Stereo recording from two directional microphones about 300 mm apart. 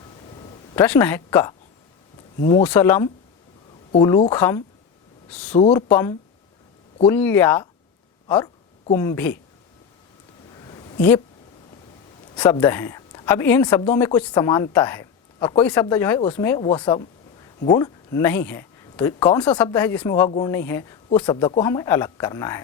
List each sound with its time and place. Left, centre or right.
0.8 s a woman's voice: centre
8.9 s a woman's voice: centre
12.4 s a woman's voice: centre